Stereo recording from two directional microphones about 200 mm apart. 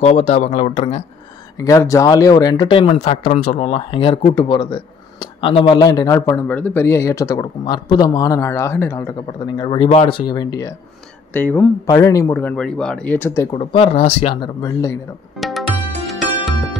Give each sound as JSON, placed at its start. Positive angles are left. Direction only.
{"t": 0.0, "sound": "speech", "side_deg": 30}
{"t": 1.6, "sound": "speech", "side_deg": 15}
{"t": 9.6, "sound": "speech", "side_deg": 25}
{"t": 11.3, "sound": "speech", "side_deg": 10}
{"t": 13.5, "sound": "speech", "side_deg": 25}
{"t": 15.3, "sound": "music", "side_deg": 0}